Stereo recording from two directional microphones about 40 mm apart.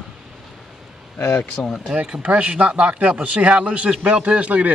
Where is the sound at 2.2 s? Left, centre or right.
Right.